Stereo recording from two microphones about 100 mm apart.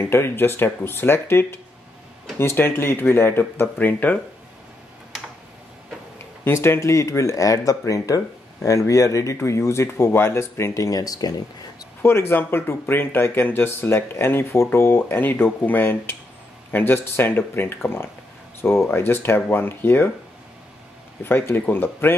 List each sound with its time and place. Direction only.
0.0 s speech: 25° left (ahead or behind)
6.1 s speech: 25° left (ahead or behind); by 11.4 s 40° left (ahead or behind)
12.0 s speech: 25° left (ahead or behind)
21.2 s speech: 25° left (ahead or behind)